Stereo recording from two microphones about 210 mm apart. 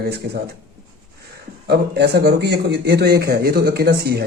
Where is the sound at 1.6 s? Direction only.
50° right (ahead or behind).